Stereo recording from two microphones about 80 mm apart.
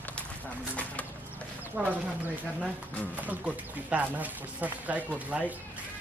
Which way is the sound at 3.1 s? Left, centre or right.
Right.